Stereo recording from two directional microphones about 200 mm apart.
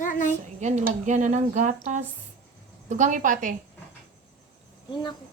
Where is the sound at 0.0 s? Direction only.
40° left (ahead or behind).